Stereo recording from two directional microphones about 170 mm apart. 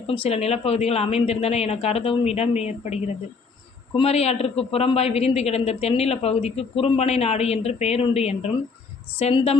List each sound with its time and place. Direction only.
0.1 s a man's voice: 35° left (ahead or behind)